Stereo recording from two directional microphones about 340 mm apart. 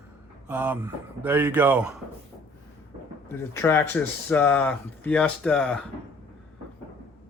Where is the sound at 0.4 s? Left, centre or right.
Centre.